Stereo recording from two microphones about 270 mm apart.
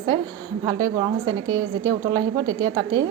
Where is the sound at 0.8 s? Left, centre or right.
Centre.